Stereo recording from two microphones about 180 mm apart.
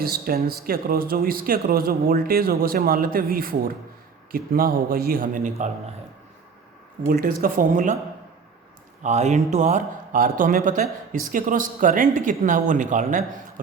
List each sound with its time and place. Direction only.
0.0 s speech: 55° right (ahead or behind)
7.1 s speech: 55° right (ahead or behind)
9.0 s speech: 40° right (ahead or behind)